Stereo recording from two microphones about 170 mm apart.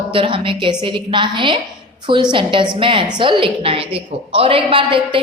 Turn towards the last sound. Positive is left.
turn(degrees=-30)  # may be behind; listen again after turning